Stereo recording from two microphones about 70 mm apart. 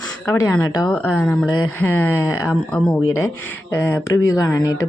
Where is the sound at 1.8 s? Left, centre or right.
Left.